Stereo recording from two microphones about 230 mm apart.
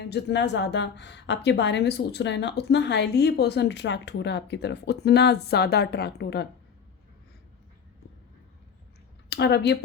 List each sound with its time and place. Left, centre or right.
0.1 s a woman's voice: left
9.3 s a woman's voice: left